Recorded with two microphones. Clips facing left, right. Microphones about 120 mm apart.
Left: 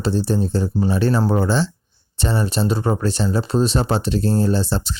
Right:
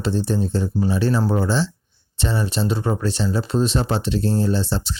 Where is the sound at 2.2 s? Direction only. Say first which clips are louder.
Left 2 dB; 40° left (ahead or behind).